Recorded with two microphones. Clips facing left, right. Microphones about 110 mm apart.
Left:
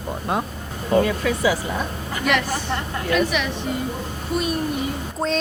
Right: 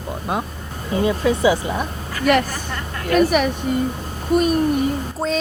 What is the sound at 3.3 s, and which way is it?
A woman's voice, 45° right (ahead or behind).